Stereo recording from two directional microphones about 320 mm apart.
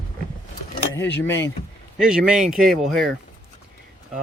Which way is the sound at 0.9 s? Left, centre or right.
Centre.